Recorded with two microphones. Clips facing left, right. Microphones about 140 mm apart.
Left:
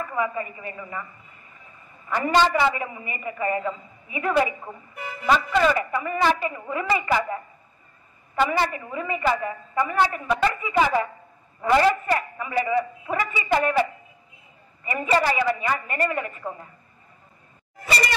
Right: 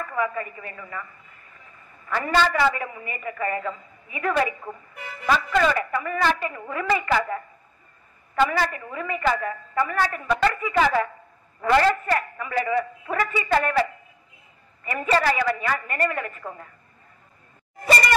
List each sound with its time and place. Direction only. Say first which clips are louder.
0.0 s a woman's voice: even; 15° left (ahead or behind)
2.0 s a woman's voice: left 2 dB; 15° left (ahead or behind)
14.9 s a woman's voice: even; 10° left (ahead or behind)